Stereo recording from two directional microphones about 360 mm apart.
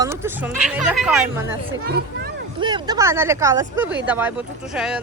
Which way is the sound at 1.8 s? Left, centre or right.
Right.